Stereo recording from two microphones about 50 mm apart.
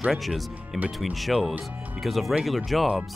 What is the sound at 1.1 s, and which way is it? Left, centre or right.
Speech, centre.